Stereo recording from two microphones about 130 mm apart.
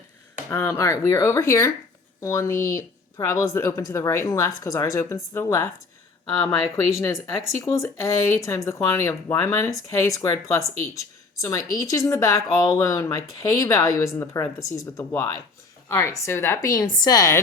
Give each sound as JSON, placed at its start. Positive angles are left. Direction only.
{"t": 0.5, "sound": "speech", "side_deg": 25}
{"t": 7.0, "sound": "speech", "side_deg": 25}